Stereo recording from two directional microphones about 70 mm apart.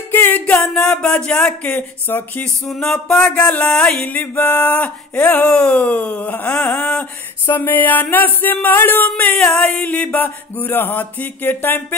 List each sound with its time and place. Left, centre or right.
0.1 s music: left
0.7 s speech: centre; by 2.4 s left
2.4 s speech: centre
4.0 s a sound: left
6.8 s speech: centre
7.4 s a sound: left